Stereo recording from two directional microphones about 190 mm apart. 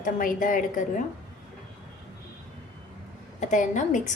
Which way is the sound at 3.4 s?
40° left (ahead or behind).